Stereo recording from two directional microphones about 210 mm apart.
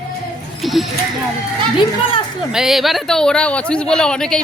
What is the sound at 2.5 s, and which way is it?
Speech, centre (ahead or behind).